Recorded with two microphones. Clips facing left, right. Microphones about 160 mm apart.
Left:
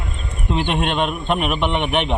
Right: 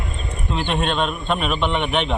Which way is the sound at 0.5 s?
15° left (ahead or behind).